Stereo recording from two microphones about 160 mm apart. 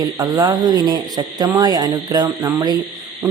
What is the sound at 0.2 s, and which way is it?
Speech, 25° right (ahead or behind).